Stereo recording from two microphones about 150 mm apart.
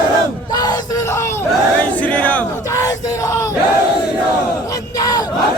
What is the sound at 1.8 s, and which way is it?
Battle cry, 10° left (ahead or behind).